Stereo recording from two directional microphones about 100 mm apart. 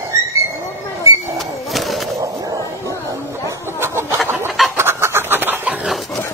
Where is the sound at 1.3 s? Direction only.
Centre (ahead or behind).